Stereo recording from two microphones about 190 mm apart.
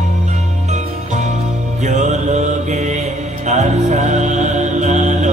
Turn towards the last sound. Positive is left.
turn(degrees=-40)  # may be behind; listen again after turning